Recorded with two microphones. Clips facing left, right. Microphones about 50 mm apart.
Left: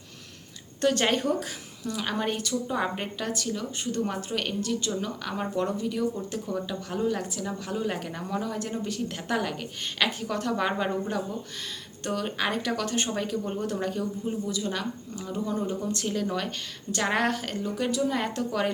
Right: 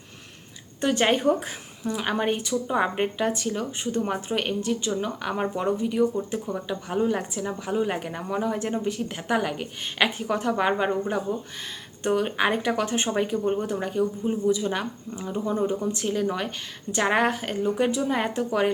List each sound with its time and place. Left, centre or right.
0.8 s a woman's voice: centre